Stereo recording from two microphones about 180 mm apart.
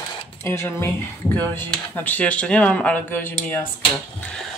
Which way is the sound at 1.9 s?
10° left (ahead or behind).